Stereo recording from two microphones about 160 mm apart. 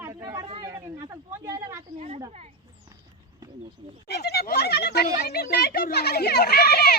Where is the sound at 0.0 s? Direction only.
20° right (ahead or behind).